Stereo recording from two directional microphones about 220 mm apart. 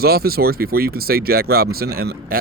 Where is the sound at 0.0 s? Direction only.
45° right (ahead or behind).